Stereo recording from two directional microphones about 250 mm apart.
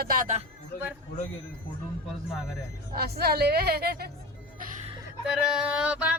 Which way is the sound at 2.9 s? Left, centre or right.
Right.